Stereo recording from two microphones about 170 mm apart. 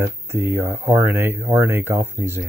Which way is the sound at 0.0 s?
15° right (ahead or behind).